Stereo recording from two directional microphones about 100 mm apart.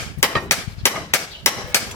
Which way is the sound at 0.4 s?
25° left (ahead or behind).